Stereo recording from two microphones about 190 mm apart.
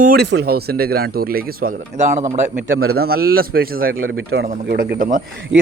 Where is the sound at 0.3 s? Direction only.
60° right (ahead or behind).